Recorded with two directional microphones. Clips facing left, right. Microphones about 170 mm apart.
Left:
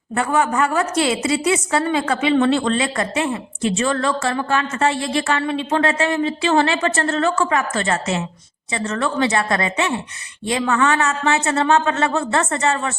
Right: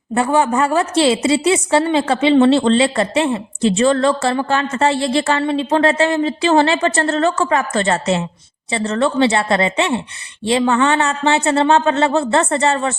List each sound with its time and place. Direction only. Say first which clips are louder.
0.1 s a woman's voice: right 4 dB; 25° right (ahead or behind)